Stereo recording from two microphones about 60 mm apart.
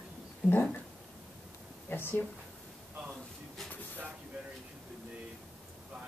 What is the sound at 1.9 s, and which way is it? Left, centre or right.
Speech, left.